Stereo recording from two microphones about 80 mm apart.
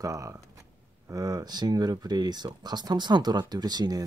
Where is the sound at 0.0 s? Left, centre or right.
Right.